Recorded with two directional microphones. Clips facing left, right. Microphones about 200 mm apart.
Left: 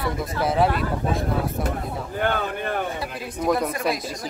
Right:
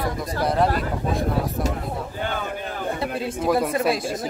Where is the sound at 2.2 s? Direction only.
60° left (ahead or behind).